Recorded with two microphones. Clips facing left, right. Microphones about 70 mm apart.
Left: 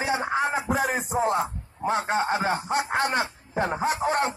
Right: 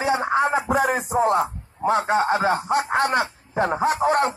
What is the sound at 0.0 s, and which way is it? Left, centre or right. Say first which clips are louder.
Speech: right 5 dB; right.